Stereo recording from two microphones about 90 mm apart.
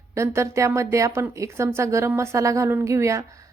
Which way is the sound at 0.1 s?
30° right (ahead or behind).